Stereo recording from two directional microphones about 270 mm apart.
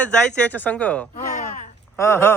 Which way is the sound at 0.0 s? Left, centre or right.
Centre.